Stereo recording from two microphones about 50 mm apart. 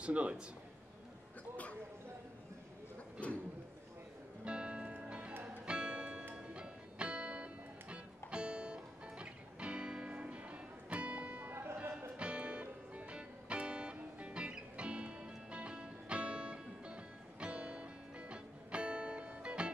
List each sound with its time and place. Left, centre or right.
0.0 s a man's voice: right
4.5 s music: right
12.2 s music: right